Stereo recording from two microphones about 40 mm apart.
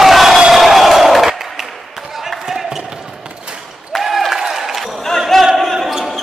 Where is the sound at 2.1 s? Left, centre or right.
Centre.